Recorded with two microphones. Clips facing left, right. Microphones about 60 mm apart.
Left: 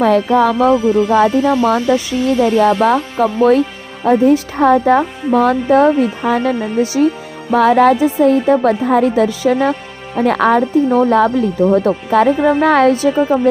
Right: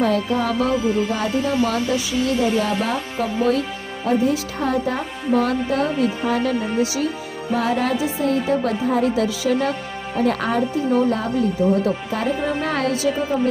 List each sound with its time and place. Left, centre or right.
0.0 s speech: left
7.5 s speech: left
11.7 s speech: left